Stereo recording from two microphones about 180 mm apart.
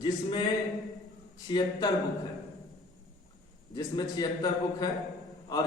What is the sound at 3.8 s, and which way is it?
Speech, 20° left (ahead or behind).